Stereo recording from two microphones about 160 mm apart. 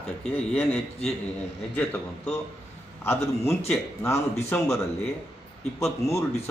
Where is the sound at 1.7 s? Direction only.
10° left (ahead or behind).